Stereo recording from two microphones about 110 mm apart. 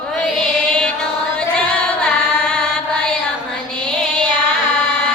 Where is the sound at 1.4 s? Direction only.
10° left (ahead or behind).